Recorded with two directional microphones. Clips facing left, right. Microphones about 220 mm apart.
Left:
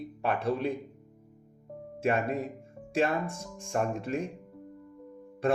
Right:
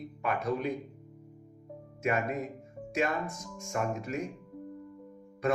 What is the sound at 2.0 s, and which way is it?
Speech, 30° left (ahead or behind).